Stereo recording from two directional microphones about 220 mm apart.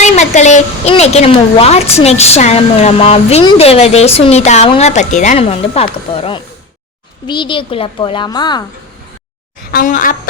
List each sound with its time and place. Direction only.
0.0 s a woman's voice: 30° left (ahead or behind)
9.7 s a woman's voice: 35° left (ahead or behind)